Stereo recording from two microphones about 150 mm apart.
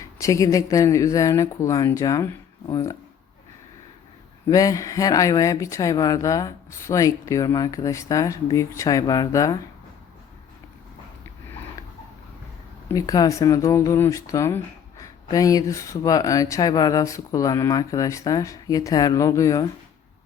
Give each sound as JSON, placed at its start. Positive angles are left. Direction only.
{"t": 0.0, "sound": "speech", "side_deg": 20}
{"t": 4.4, "sound": "speech", "side_deg": 25}
{"t": 12.9, "sound": "speech", "side_deg": 25}